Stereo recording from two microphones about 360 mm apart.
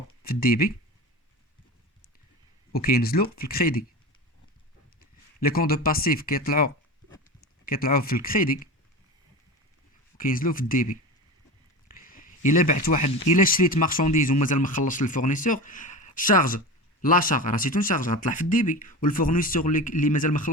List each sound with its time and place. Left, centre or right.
0.2 s speech: left
2.7 s speech: left
4.9 s speech: left
10.2 s speech: left